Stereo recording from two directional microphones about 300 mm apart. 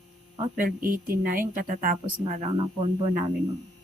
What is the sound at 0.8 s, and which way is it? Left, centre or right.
Speech, right.